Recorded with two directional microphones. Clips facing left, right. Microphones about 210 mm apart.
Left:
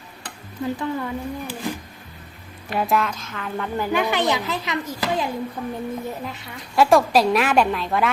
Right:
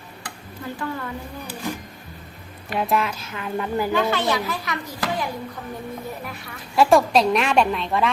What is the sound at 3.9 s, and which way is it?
Speech, 15° left (ahead or behind).